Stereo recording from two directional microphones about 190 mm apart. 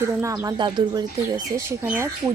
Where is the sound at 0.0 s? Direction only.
15° right (ahead or behind).